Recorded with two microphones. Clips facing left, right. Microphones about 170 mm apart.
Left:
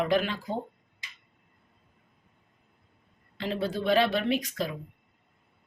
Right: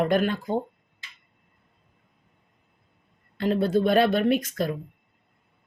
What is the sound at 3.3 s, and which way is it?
Speech, 50° right (ahead or behind).